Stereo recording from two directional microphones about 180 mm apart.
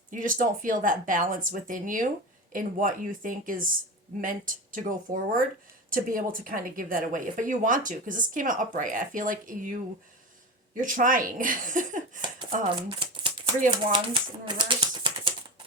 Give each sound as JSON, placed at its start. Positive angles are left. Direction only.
{"t": 0.1, "sound": "a woman's voice", "side_deg": -45}
{"t": 10.8, "sound": "a woman's voice", "side_deg": -50}
{"t": 12.6, "sound": "a sound", "side_deg": -25}
{"t": 13.7, "sound": "speech", "side_deg": -25}